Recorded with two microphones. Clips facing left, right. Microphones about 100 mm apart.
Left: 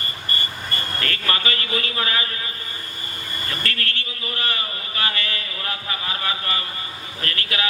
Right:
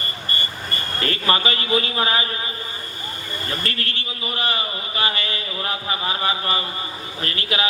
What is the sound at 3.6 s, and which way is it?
A man's voice, 20° right (ahead or behind).